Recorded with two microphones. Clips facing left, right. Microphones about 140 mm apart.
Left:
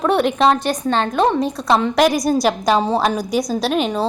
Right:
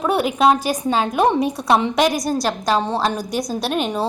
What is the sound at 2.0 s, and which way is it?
A woman's voice, 5° left (ahead or behind).